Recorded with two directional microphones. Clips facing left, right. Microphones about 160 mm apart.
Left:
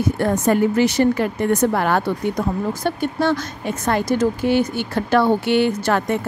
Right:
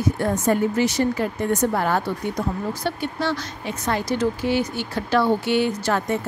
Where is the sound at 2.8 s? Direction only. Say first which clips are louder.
Left 6 dB; 50° left (ahead or behind); by 6.2 s 65° left (ahead or behind).